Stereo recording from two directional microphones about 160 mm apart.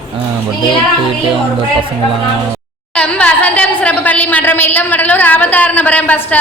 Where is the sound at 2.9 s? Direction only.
10° left (ahead or behind).